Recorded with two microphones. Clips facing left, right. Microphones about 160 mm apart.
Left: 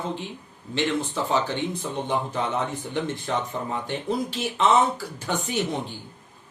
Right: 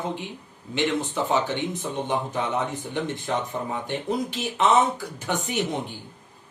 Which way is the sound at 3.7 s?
15° right (ahead or behind).